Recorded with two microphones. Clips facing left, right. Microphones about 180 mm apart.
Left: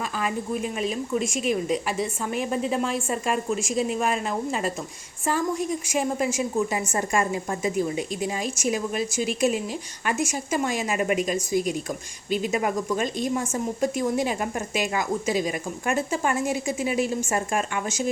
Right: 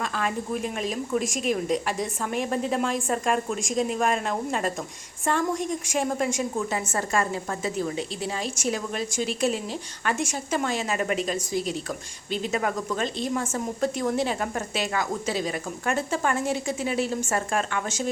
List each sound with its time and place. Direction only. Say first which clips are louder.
0.2 s a woman's voice: left 2 dB; 5° left (ahead or behind)